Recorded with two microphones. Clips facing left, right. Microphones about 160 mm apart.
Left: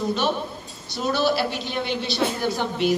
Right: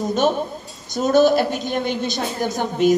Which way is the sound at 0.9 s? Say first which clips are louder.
Right 7 dB; 45° right (ahead or behind).